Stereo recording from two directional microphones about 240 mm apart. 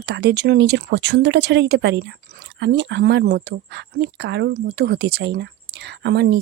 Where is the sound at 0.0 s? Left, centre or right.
Right.